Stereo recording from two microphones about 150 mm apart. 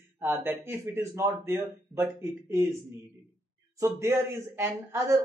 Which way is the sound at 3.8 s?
20° right (ahead or behind).